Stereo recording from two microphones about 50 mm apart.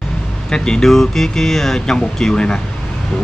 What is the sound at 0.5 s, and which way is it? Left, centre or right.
Speech, centre.